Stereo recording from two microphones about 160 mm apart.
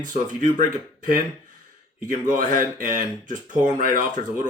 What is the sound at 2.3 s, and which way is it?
Speech, 55° right (ahead or behind).